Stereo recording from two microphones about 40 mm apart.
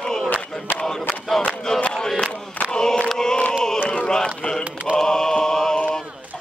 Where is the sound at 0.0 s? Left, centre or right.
Centre.